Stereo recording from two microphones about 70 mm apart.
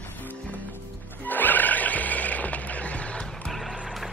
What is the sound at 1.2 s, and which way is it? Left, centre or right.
Music, left.